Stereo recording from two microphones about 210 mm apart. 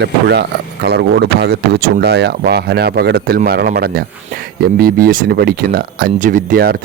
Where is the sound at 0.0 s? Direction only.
50° right (ahead or behind).